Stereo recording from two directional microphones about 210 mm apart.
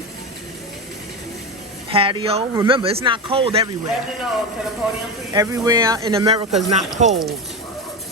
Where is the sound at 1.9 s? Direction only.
25° right (ahead or behind).